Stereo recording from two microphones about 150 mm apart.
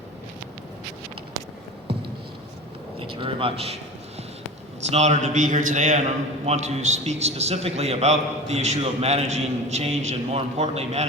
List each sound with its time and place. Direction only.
3.0 s a man's voice: 35° right (ahead or behind)
4.9 s a man's voice: 50° right (ahead or behind)